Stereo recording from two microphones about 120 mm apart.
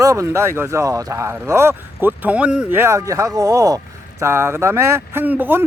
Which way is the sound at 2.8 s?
25° right (ahead or behind).